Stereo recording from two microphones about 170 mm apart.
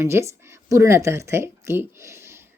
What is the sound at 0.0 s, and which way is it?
Speech, 15° right (ahead or behind).